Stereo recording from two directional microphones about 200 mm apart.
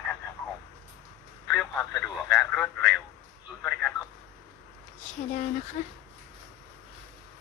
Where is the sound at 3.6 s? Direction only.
5° left (ahead or behind).